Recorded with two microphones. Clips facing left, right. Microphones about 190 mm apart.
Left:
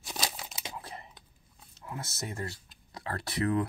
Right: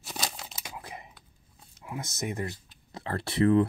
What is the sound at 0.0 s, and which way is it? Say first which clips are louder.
Tearing: even; centre (ahead or behind).